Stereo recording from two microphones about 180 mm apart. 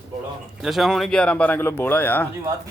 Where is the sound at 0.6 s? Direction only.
Centre (ahead or behind).